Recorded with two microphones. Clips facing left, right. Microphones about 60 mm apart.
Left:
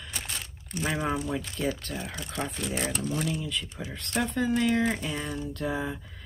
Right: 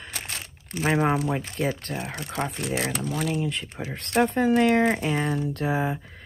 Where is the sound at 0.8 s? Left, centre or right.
Right.